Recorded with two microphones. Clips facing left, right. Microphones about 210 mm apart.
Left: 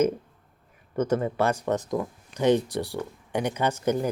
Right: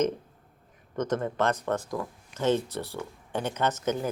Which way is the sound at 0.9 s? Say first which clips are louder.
Left 3 dB; 10° left (ahead or behind).